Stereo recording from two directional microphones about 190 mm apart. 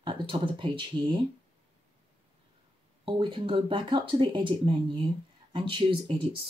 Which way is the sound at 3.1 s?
25° right (ahead or behind).